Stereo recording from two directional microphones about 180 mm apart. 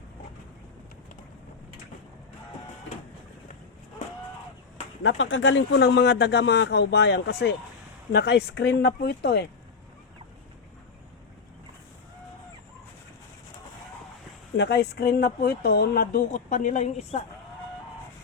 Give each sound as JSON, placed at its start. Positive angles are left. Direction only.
{"t": 5.0, "sound": "a man's voice", "side_deg": 90}
{"t": 14.5, "sound": "speech", "side_deg": 70}